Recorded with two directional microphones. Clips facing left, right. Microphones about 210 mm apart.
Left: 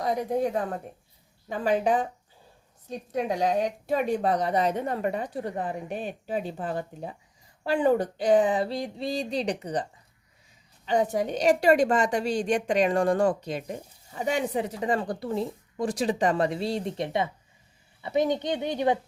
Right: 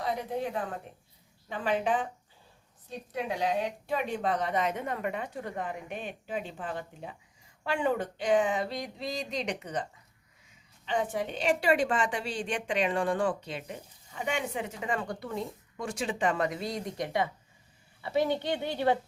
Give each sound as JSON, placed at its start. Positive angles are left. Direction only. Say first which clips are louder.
{"t": 0.0, "sound": "a woman's voice", "louder": "left 6 dB", "side_deg": 40}
{"t": 3.1, "sound": "a woman's voice", "louder": "left 5 dB", "side_deg": 40}
{"t": 10.8, "sound": "a woman's voice", "louder": "left 6 dB", "side_deg": 40}